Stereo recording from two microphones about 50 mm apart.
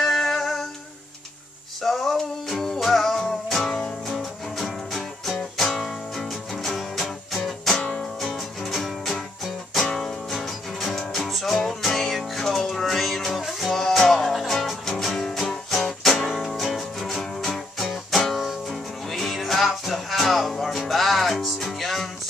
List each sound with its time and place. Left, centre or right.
0.0 s music: centre
1.8 s music: centre
7.7 s music: centre
8.0 s music: centre